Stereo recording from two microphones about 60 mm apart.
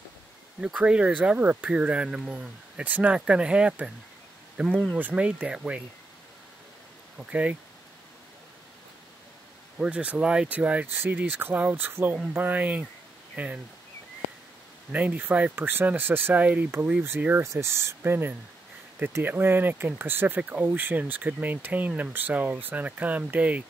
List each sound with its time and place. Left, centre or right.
0.7 s speech: centre
2.8 s speech: right
4.6 s speech: centre
4.9 s speech: right
7.2 s speech: right
9.8 s speech: centre
10.9 s speech: right
14.9 s speech: right
17.4 s speech: right